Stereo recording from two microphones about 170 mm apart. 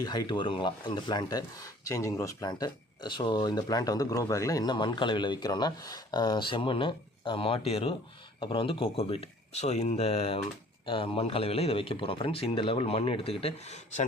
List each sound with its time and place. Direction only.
0.0 s a man's voice: 25° left (ahead or behind); by 14.0 s 40° left (ahead or behind)